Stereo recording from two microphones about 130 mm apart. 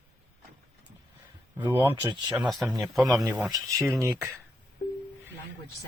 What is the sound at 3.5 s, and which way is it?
Speech, 25° right (ahead or behind).